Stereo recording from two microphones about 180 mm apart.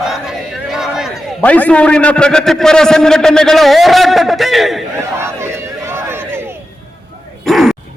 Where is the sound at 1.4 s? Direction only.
10° left (ahead or behind).